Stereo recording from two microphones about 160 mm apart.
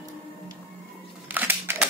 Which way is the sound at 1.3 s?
15° right (ahead or behind).